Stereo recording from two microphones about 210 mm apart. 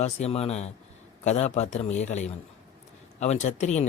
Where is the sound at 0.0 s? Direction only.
30° left (ahead or behind).